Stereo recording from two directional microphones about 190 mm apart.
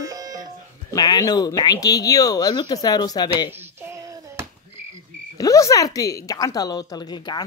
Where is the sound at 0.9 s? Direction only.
20° left (ahead or behind).